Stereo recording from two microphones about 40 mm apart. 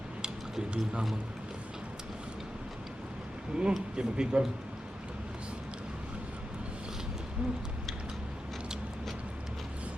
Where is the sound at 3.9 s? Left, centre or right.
Right.